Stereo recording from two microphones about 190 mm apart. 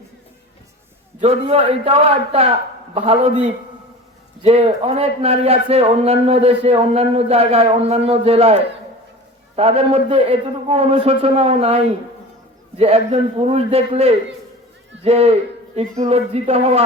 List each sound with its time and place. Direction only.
1.2 s a man's voice: 35° right (ahead or behind)
4.4 s a man's voice: 30° right (ahead or behind)